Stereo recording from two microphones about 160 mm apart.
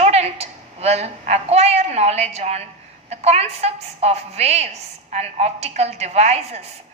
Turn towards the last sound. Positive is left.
turn(degrees=-40)  # may be behind; listen again after turning